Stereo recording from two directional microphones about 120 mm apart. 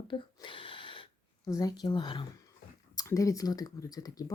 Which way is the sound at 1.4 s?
30° left (ahead or behind).